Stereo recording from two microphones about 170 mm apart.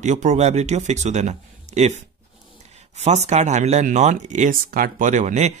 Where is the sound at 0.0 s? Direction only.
45° right (ahead or behind).